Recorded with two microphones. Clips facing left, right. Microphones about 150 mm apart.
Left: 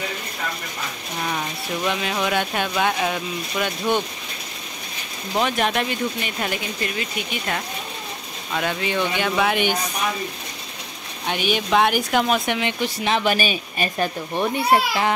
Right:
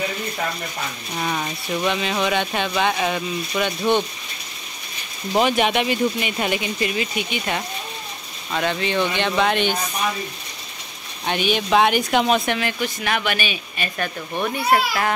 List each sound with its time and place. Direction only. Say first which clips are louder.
1.9 s speech: right 1 dB; 5° left (ahead or behind)
5.4 s speech: right 3 dB; centre (ahead or behind)
11.2 s speech: right 1 dB; 5° left (ahead or behind)
12.4 s speech: even; 15° left (ahead or behind)
12.8 s speech: left 6 dB; 30° left (ahead or behind)
14.3 s a child's voice: even; 20° left (ahead or behind)